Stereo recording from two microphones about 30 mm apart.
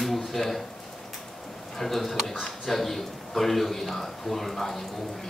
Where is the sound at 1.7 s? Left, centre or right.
Centre.